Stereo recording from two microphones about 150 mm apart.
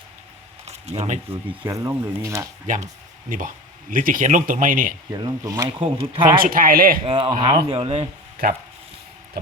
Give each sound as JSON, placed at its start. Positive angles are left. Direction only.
{"t": 0.7, "sound": "speech", "side_deg": -45}
{"t": 1.6, "sound": "speech", "side_deg": -20}
{"t": 2.6, "sound": "speech", "side_deg": -60}
{"t": 5.1, "sound": "speech", "side_deg": -25}
{"t": 5.8, "sound": "speech", "side_deg": -35}
{"t": 6.3, "sound": "speech", "side_deg": -70}
{"t": 7.0, "sound": "speech", "side_deg": -35}